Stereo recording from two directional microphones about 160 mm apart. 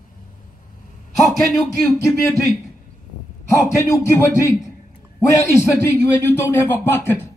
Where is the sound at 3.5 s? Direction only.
20° left (ahead or behind).